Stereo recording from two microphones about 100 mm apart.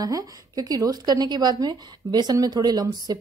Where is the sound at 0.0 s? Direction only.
40° right (ahead or behind).